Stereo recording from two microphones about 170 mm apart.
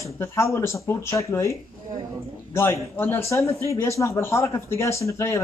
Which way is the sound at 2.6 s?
15° left (ahead or behind).